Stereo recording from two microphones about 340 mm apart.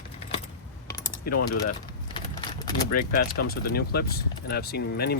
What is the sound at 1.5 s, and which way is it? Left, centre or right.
Vehicle, centre.